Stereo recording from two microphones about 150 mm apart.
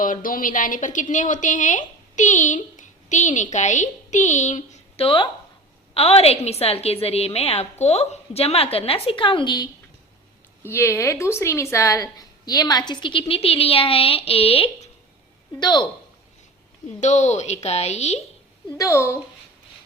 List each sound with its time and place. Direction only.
0.0 s a woman's voice: 65° left (ahead or behind)
5.0 s a woman's voice: 35° left (ahead or behind)
10.6 s a woman's voice: 15° left (ahead or behind); by 14.8 s 40° left (ahead or behind)
15.6 s a woman's voice: 30° left (ahead or behind)
17.0 s speech: 50° left (ahead or behind)
18.8 s a woman's voice: 20° left (ahead or behind)